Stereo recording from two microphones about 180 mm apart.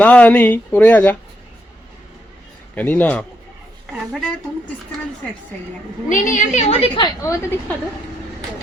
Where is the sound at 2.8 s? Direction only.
10° left (ahead or behind).